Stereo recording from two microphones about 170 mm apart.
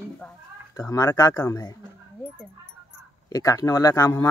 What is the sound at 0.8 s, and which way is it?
Speech, 15° left (ahead or behind).